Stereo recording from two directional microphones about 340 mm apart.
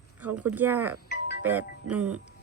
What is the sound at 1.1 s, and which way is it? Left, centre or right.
Music, left.